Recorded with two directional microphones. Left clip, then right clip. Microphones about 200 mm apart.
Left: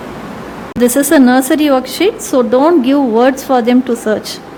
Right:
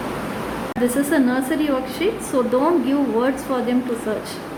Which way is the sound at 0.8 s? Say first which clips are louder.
Left 10 dB; 60° left (ahead or behind).